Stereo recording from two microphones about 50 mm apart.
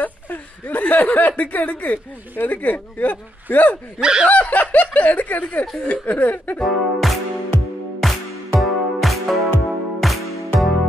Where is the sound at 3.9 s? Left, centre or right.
Centre.